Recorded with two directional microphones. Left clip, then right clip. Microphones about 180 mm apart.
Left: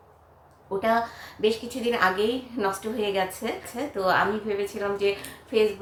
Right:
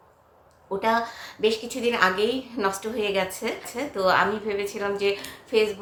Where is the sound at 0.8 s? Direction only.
20° right (ahead or behind).